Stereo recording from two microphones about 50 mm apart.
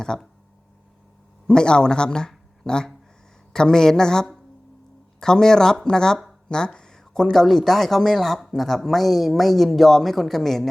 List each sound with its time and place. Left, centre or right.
0.0 s a woman's voice: centre
1.5 s a woman's voice: centre
6.5 s a sound: centre
7.4 s speech: centre